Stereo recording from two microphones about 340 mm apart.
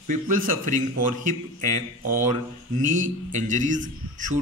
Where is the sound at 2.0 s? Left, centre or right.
Right.